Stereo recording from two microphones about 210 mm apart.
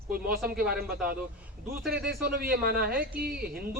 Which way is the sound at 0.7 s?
45° right (ahead or behind).